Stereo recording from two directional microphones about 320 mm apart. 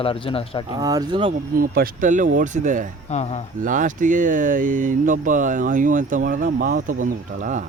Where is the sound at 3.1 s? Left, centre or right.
Centre.